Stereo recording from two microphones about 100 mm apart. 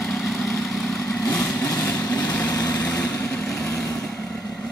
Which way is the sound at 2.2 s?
15° left (ahead or behind).